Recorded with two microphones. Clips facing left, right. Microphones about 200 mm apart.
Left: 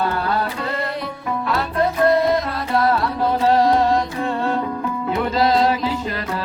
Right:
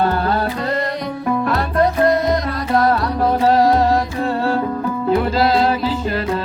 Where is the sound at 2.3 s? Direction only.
45° right (ahead or behind).